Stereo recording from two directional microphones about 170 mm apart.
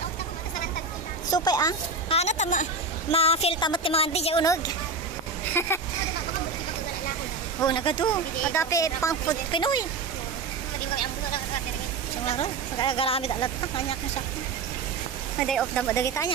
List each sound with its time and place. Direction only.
1.3 s speech: 25° left (ahead or behind)
2.0 s a woman's voice: 40° left (ahead or behind)
4.4 s speech: 25° left (ahead or behind)
7.6 s speech: 30° left (ahead or behind)
12.3 s a woman's voice: 35° left (ahead or behind)
15.4 s speech: centre (ahead or behind)
15.9 s speech: 20° left (ahead or behind)